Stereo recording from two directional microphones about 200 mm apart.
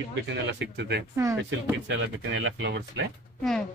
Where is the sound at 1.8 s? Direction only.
70° right (ahead or behind).